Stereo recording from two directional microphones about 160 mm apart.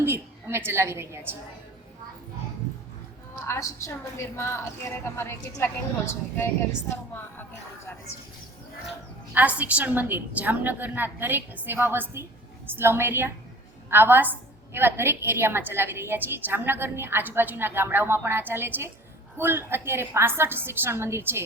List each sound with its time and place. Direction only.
0.0 s a woman's voice: 15° right (ahead or behind)
3.4 s a woman's voice: 20° left (ahead or behind)
9.3 s a woman's voice: 10° right (ahead or behind)